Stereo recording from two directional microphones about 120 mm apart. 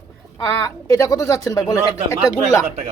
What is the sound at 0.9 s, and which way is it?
Speech, 30° left (ahead or behind).